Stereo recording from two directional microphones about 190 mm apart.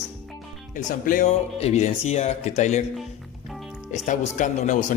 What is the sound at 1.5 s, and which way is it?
Speech, 35° left (ahead or behind).